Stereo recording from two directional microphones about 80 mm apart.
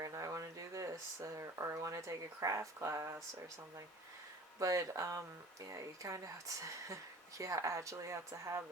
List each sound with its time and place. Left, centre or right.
0.0 s speech: right
4.6 s speech: right